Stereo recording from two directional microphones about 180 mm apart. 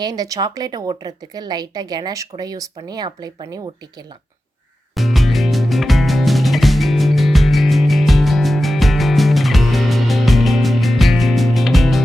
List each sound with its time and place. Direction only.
0.0 s speech: 20° right (ahead or behind)
4.9 s music: centre (ahead or behind)